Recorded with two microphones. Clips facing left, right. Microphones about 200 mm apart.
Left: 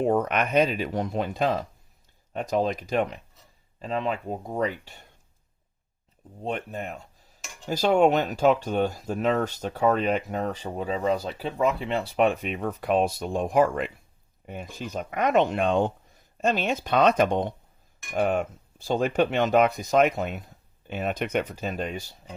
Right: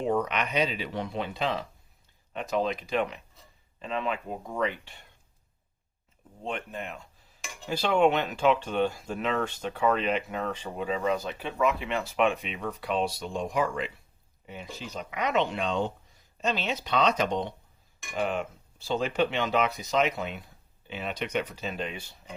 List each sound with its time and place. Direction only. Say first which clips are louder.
0.0 s speech: left 4 dB; 50° left (ahead or behind)
6.4 s speech: left 4 dB; 40° left (ahead or behind)